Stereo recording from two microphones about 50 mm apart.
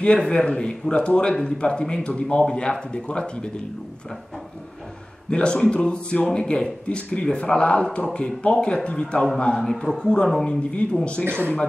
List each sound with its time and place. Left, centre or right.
0.0 s speech: left
5.3 s speech: centre
11.2 s speech: right